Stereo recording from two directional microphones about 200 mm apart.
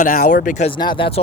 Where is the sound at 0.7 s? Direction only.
25° left (ahead or behind).